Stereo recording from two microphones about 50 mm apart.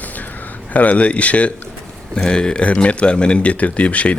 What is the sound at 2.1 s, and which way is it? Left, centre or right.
Speech, centre.